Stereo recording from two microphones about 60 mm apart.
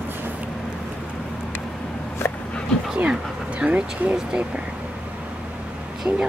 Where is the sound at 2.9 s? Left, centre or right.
Centre.